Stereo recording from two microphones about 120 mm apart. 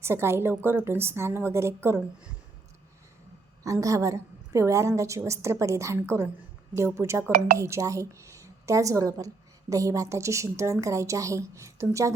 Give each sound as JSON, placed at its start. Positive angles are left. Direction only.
{"t": 0.0, "sound": "speech", "side_deg": -20}
{"t": 3.6, "sound": "speech", "side_deg": -25}